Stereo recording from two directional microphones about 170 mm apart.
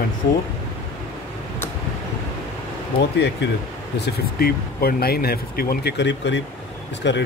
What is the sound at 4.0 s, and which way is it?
A man's voice, 70° left (ahead or behind).